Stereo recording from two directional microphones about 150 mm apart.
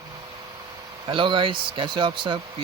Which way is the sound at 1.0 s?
30° right (ahead or behind).